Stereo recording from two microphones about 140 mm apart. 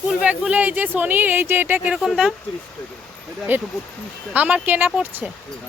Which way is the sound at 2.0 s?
Centre (ahead or behind).